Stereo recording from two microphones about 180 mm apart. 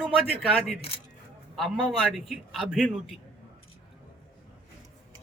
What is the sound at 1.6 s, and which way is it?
A man's voice, centre (ahead or behind).